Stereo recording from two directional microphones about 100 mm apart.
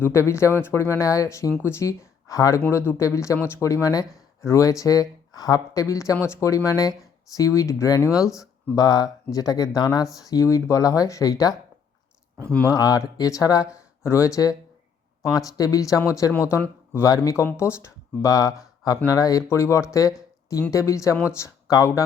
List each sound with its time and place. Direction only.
0.0 s speech: 25° left (ahead or behind)
12.7 s speech: 35° left (ahead or behind)